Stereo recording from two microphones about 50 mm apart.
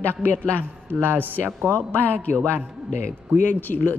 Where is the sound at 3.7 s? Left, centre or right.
Centre.